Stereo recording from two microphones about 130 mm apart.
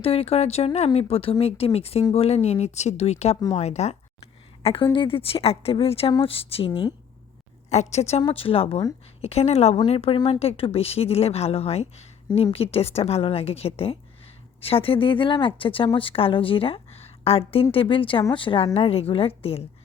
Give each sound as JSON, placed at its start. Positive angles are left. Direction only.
{"t": 0.0, "sound": "speech", "side_deg": 50}
{"t": 4.6, "sound": "speech", "side_deg": 45}
{"t": 6.7, "sound": "speech", "side_deg": 35}
{"t": 7.7, "sound": "a woman's voice", "side_deg": 60}